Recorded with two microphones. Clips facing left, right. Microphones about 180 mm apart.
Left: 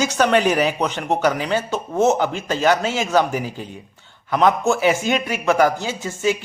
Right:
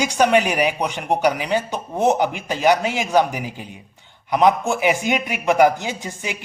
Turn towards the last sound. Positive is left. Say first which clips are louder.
# left 7 dB
turn(degrees=-15)  # may be behind; listen again after turning